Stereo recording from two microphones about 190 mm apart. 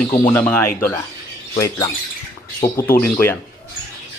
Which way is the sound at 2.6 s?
15° left (ahead or behind).